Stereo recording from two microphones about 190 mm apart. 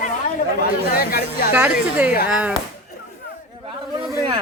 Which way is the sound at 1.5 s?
10° right (ahead or behind).